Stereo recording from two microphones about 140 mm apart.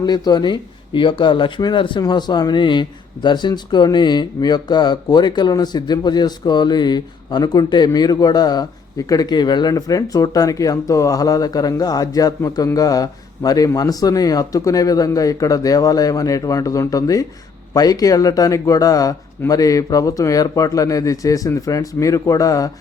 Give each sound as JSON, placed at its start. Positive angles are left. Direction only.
{"t": 0.0, "sound": "speech", "side_deg": 30}